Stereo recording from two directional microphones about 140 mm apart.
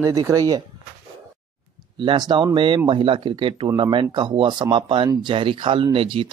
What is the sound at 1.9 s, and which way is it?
Speech, 35° right (ahead or behind).